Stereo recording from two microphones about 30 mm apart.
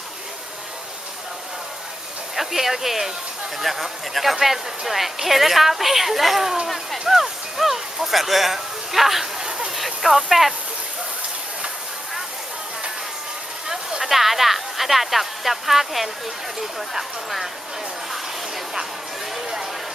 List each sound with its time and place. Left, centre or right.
2.3 s speech: centre
9.4 s a sound: right
9.7 s speech: centre
14.0 s speech: centre